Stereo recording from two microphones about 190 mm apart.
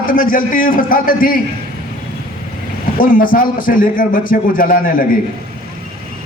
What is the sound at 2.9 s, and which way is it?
A man's voice, 45° left (ahead or behind).